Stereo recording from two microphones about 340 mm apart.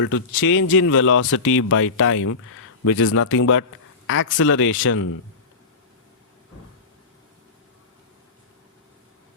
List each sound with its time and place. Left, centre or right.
0.0 s speech: left